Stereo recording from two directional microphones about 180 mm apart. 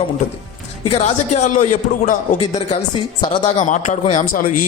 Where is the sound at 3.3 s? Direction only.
45° left (ahead or behind).